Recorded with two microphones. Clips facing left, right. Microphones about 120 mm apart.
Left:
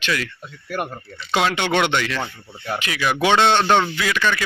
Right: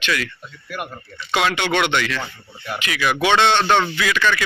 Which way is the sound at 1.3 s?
30° left (ahead or behind).